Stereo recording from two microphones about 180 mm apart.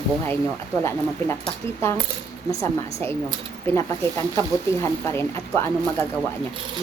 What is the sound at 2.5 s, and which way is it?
A woman's voice, 15° left (ahead or behind).